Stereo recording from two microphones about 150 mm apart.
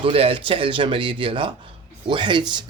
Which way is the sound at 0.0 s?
40° right (ahead or behind).